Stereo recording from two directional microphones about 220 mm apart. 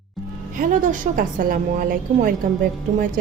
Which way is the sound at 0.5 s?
35° right (ahead or behind).